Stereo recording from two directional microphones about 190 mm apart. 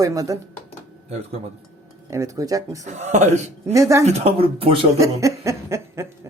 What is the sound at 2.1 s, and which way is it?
Speech, 15° right (ahead or behind).